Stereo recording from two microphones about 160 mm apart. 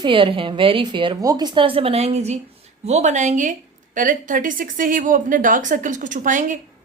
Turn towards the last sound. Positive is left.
turn(degrees=-50)  # may be behind; listen again after turning